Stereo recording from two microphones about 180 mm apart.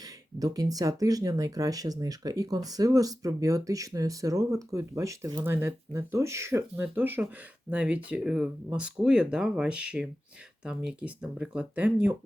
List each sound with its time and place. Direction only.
0.0 s speech: 20° right (ahead or behind)